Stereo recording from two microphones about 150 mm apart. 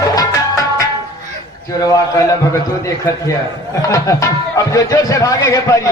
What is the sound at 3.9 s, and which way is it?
A man's voice, 25° left (ahead or behind).